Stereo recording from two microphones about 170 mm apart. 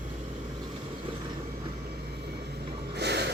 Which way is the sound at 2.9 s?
80° right.